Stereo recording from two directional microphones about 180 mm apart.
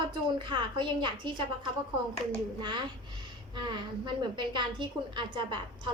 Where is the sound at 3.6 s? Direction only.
25° right (ahead or behind).